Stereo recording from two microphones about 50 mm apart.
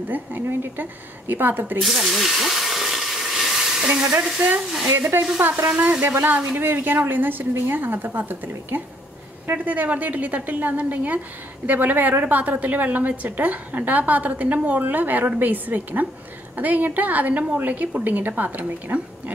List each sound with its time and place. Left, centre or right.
0.1 s a woman's voice: right
1.8 s hiss: centre
3.8 s frying: right
5.0 s a woman's voice: right